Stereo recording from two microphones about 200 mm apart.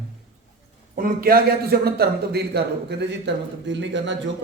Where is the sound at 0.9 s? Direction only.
45° right (ahead or behind); by 4.2 s 65° right (ahead or behind).